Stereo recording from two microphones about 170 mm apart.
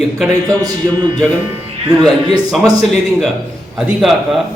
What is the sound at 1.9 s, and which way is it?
Speech, centre (ahead or behind).